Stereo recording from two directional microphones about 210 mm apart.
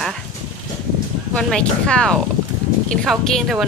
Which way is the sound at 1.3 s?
5° left (ahead or behind).